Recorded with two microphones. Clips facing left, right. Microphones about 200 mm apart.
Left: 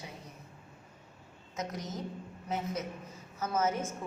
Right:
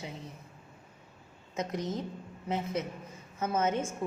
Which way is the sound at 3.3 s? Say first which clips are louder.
Right 2 dB; 30° right (ahead or behind).